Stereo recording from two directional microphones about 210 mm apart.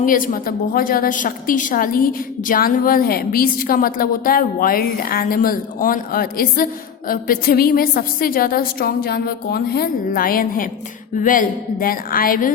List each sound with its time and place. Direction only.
0.0 s a woman's voice: 40° left (ahead or behind)